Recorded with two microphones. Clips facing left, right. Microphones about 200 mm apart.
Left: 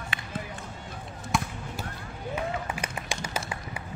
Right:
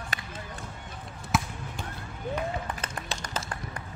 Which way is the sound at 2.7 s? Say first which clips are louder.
Left 2 dB; 10° left (ahead or behind).